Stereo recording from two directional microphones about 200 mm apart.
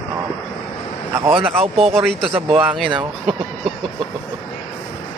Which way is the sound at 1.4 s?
30° right (ahead or behind).